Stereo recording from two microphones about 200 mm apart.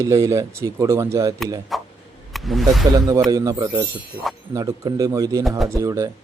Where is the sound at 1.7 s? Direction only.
Centre (ahead or behind).